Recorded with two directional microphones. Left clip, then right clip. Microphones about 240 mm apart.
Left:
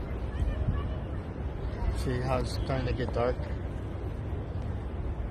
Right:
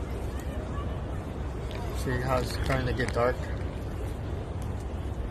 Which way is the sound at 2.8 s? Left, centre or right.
Centre.